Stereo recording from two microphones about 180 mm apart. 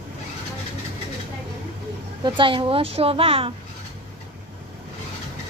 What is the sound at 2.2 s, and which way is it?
A woman's voice, 25° right (ahead or behind).